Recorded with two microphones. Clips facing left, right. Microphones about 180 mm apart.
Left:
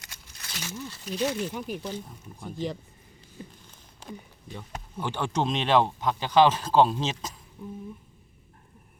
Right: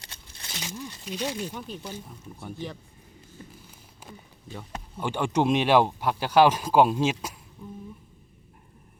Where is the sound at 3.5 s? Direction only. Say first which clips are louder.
Right 3 dB; 5° right (ahead or behind).